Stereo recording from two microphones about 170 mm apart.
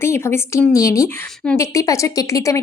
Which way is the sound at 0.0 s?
15° left (ahead or behind).